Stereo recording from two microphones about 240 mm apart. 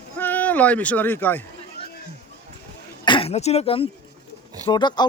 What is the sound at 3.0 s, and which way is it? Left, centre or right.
Speech, left.